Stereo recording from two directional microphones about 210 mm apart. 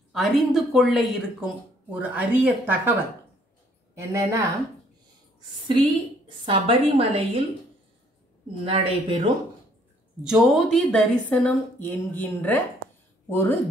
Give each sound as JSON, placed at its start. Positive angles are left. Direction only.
{"t": 0.1, "sound": "a woman's voice", "side_deg": 0}
{"t": 3.9, "sound": "speech", "side_deg": -15}
{"t": 6.2, "sound": "a woman's voice", "side_deg": -25}
{"t": 8.6, "sound": "a woman's voice", "side_deg": -25}
{"t": 10.2, "sound": "a woman's voice", "side_deg": 0}